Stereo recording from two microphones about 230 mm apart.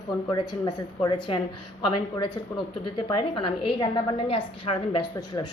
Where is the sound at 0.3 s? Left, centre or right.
Centre.